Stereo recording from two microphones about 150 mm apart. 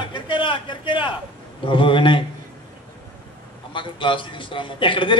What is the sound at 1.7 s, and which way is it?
Speech, 35° left (ahead or behind).